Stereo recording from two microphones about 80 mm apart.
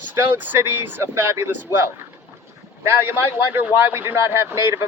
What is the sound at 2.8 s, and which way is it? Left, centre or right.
A man's voice, right.